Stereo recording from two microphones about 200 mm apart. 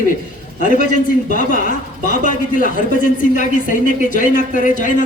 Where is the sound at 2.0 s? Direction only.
40° left (ahead or behind).